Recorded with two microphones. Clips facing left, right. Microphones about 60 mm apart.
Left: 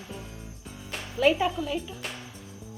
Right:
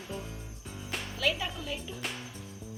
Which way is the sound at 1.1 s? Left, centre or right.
Left.